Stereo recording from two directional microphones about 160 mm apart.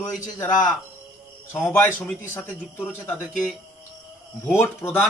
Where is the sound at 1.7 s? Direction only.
10° left (ahead or behind).